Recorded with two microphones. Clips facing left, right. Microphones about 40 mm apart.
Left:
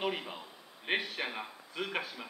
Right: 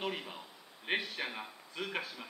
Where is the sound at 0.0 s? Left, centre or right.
Centre.